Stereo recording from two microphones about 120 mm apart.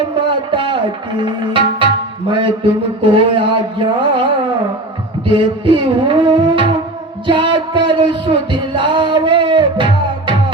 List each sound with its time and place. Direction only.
0.2 s a sound: 45° right (ahead or behind)
1.2 s music: 45° right (ahead or behind)
3.0 s music: 45° right (ahead or behind)
5.2 s music: 45° right (ahead or behind)